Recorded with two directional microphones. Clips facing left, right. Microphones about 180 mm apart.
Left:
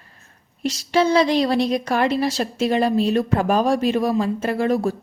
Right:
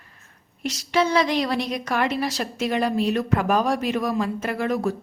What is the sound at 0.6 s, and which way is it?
A woman's voice, 30° left (ahead or behind).